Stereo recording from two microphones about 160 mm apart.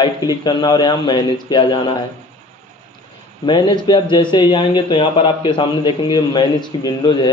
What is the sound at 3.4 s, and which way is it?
Speech, 30° left (ahead or behind).